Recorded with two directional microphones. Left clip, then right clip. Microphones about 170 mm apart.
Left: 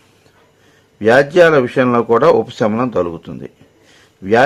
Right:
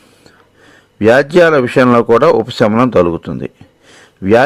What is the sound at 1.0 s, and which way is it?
Speech, 40° right (ahead or behind).